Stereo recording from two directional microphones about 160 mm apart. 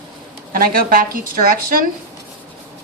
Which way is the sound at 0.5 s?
60° right (ahead or behind).